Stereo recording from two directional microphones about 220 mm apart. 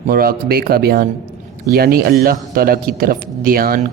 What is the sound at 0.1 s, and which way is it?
Speech, 40° right (ahead or behind).